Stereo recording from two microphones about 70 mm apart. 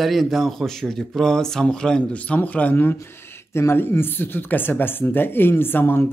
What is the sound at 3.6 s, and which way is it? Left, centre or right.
Speech, left.